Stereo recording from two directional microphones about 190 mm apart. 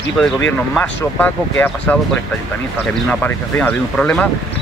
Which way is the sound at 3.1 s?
5° left (ahead or behind).